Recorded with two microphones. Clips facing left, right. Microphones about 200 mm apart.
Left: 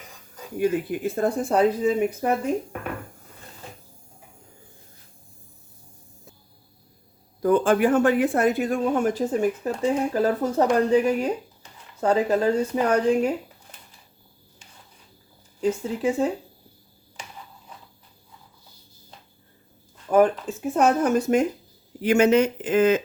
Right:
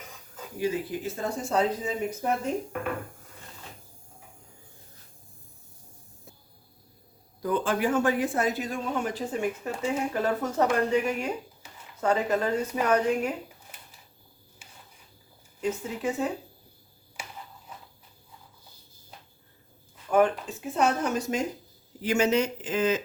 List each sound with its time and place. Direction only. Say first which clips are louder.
0.6 s speech: left 6 dB; 55° left (ahead or behind)
7.4 s speech: left 7 dB; 50° left (ahead or behind); by 13.3 s 30° left (ahead or behind)
16.2 s speech: left 5 dB; 40° left (ahead or behind)
17.2 s a sound: even; 10° right (ahead or behind)
20.1 s speech: left 4 dB; 40° left (ahead or behind); by 23.0 s 55° left (ahead or behind)